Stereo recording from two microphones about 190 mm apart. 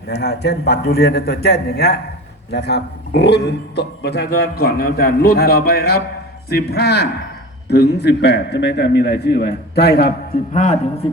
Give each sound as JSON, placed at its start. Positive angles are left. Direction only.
{"t": 0.1, "sound": "a man's voice", "side_deg": 60}
{"t": 10.5, "sound": "a man's voice", "side_deg": 40}